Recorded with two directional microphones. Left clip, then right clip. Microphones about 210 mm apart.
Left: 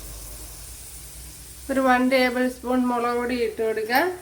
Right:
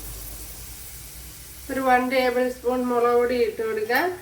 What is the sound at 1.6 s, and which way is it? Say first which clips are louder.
Speech: left 1 dB; 45° left (ahead or behind).